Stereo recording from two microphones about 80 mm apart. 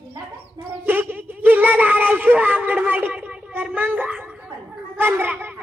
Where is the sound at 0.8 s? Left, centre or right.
Right.